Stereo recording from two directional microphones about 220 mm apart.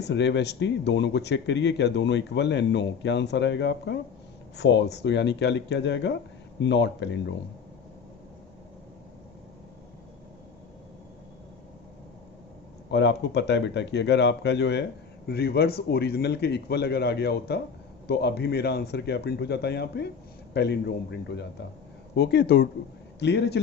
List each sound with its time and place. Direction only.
0.0 s speech: 50° left (ahead or behind)
12.9 s speech: 55° left (ahead or behind)